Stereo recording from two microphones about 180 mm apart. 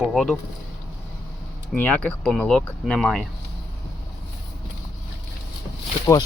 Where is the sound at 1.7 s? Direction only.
10° left (ahead or behind).